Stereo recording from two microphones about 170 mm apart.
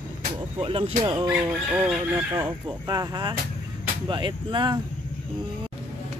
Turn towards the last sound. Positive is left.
turn(degrees=-25)  # may be behind; listen again after turning